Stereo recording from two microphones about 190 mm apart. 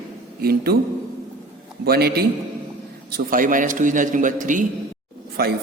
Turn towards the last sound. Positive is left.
turn(degrees=-55)  # may be behind; listen again after turning